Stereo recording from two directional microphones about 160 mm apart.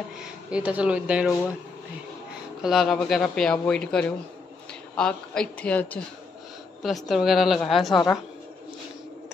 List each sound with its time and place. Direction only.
0.5 s a woman's voice: 10° right (ahead or behind)
2.6 s a woman's voice: centre (ahead or behind)
7.9 s a woman's voice: 25° left (ahead or behind)